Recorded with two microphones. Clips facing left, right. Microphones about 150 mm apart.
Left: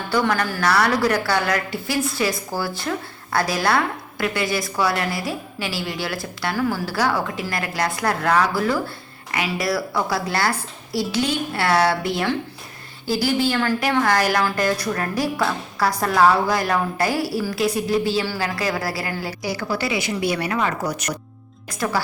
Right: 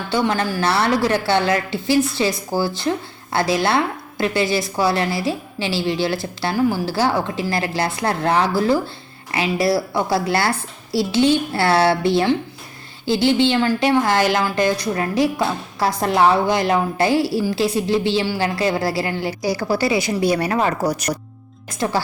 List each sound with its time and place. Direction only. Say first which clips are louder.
0.1 s a woman's voice: right 1 dB; 25° right (ahead or behind)
19.4 s a woman's voice: right 6 dB; 40° right (ahead or behind)